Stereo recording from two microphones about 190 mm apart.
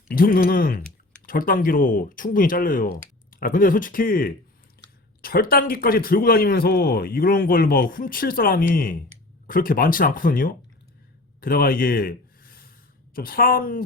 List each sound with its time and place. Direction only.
0.1 s speech: 50° left (ahead or behind)
11.3 s a sound: 50° left (ahead or behind)
13.1 s speech: 50° left (ahead or behind)